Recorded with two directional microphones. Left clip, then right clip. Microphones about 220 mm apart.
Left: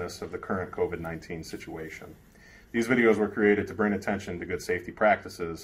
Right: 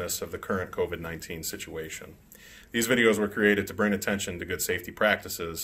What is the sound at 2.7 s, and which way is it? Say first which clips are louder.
Speech: even; 25° right (ahead or behind).